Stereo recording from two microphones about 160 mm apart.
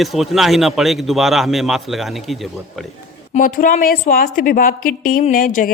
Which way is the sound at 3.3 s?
55° left (ahead or behind).